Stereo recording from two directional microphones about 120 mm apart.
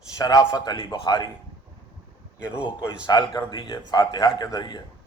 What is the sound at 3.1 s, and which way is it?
A man's voice, 35° left (ahead or behind).